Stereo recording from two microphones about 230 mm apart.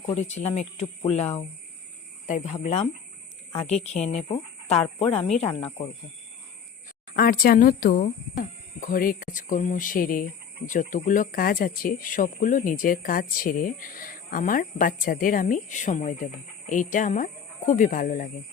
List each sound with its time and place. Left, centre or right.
0.0 s speech: left
7.2 s speech: left